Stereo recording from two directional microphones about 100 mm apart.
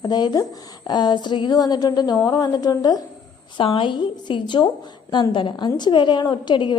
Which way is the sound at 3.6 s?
60° left (ahead or behind).